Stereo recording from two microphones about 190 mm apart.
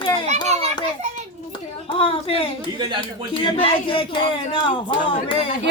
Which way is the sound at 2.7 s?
25° right (ahead or behind).